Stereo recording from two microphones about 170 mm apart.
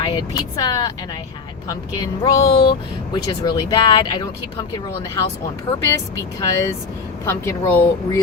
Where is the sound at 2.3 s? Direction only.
20° left (ahead or behind).